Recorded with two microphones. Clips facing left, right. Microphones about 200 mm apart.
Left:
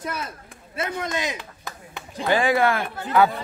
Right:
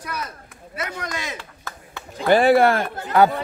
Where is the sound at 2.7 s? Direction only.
40° right (ahead or behind).